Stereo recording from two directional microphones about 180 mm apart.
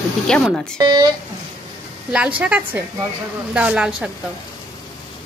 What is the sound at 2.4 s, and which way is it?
Speech, 10° right (ahead or behind).